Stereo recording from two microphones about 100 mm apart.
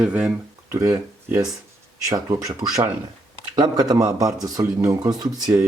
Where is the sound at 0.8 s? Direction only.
35° right (ahead or behind).